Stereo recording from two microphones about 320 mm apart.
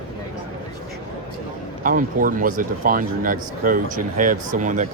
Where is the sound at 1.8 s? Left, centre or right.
Right.